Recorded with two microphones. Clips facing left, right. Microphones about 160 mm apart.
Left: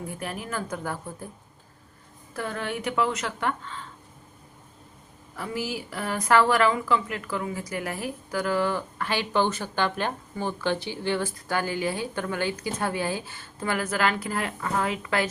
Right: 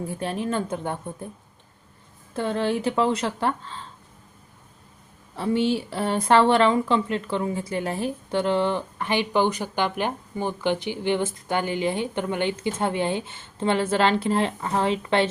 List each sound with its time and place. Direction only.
0.0 s speech: 30° right (ahead or behind)
2.3 s speech: 30° right (ahead or behind)
5.4 s speech: 30° right (ahead or behind)